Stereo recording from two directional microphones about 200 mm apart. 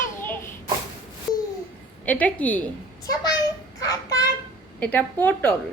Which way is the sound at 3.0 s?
20° left (ahead or behind).